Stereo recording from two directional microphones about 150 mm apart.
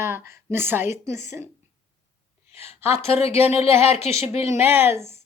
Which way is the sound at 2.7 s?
15° right (ahead or behind).